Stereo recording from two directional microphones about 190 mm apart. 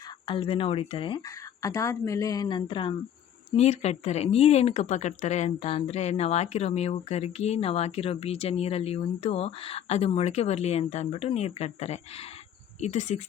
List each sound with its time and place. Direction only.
0.3 s a woman's voice: 30° left (ahead or behind)
1.6 s a woman's voice: 15° left (ahead or behind); by 13.2 s 40° left (ahead or behind)